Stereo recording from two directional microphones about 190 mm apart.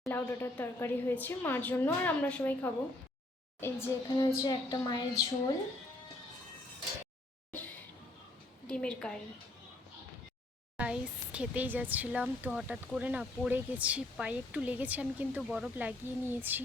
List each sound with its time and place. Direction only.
0.0 s speech: 10° left (ahead or behind)
4.3 s a woman's voice: 20° left (ahead or behind)
8.6 s a woman's voice: 5° left (ahead or behind)
10.8 s speech: 5° right (ahead or behind)